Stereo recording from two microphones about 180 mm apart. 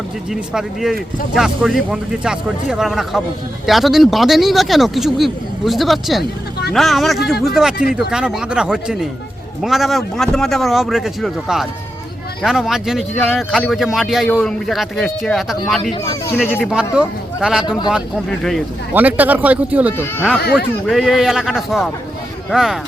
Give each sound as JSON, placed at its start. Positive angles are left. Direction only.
{"t": 0.3, "sound": "speech", "side_deg": -5}
{"t": 16.2, "sound": "speech", "side_deg": 10}
{"t": 16.6, "sound": "speech", "side_deg": -5}
{"t": 18.9, "sound": "speech", "side_deg": -10}
{"t": 20.0, "sound": "speech", "side_deg": 10}